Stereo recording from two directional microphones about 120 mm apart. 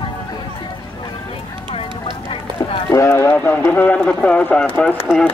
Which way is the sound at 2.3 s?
50° left (ahead or behind).